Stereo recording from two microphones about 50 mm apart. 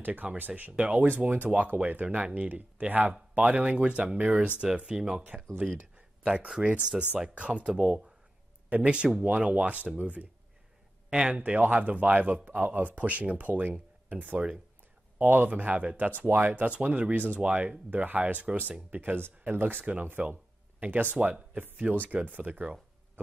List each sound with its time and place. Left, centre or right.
0.0 s speech: right
4.2 s speech: right
4.7 s speech: centre; by 16.6 s right
16.6 s speech: right
20.2 s speech: right
22.6 s a sound: right